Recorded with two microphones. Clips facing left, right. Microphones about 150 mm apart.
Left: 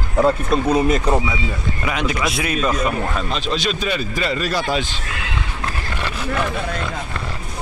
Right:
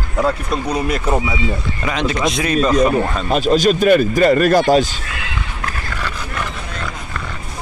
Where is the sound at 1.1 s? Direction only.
10° right (ahead or behind).